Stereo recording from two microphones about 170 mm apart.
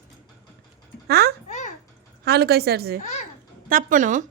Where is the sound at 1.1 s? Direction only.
65° right (ahead or behind).